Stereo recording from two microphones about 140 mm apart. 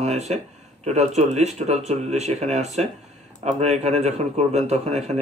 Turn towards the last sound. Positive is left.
turn(degrees=-50)  # may be behind; listen again after turning